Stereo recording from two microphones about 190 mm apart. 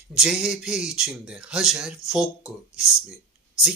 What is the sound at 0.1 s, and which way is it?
Speech, 5° right (ahead or behind).